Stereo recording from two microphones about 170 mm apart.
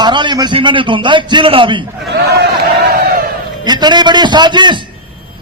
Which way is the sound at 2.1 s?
75° right (ahead or behind).